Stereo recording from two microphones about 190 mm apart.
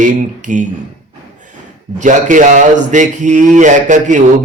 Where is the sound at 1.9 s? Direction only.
40° right (ahead or behind).